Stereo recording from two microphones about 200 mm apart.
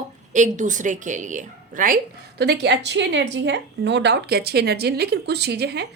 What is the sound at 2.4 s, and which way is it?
A woman's voice, 55° right (ahead or behind).